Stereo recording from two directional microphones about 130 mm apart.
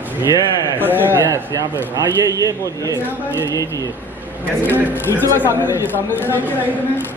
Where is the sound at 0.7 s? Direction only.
15° right (ahead or behind).